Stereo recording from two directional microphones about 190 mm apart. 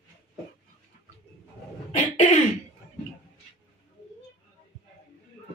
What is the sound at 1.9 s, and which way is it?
Cough, 30° left (ahead or behind).